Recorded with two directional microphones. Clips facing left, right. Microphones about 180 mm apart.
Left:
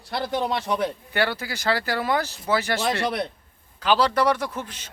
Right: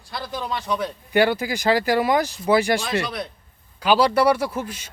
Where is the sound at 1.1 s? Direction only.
15° right (ahead or behind).